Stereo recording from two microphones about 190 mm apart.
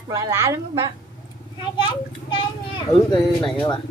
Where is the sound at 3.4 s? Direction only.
5° left (ahead or behind).